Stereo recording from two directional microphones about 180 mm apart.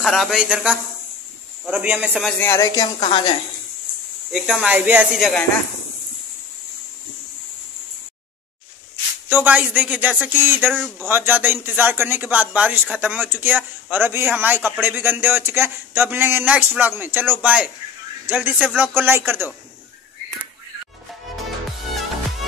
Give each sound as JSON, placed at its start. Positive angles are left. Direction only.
{"t": 0.0, "sound": "a man's voice", "side_deg": 0}
{"t": 2.2, "sound": "a woman's voice", "side_deg": 10}
{"t": 4.3, "sound": "speech", "side_deg": 0}
{"t": 9.3, "sound": "a man's voice", "side_deg": -10}
{"t": 10.7, "sound": "speech", "side_deg": 0}
{"t": 11.1, "sound": "a man's voice", "side_deg": -10}